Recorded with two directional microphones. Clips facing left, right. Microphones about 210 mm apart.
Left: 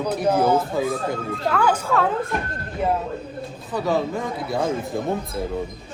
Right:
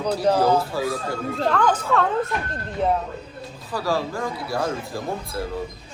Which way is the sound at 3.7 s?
20° left (ahead or behind).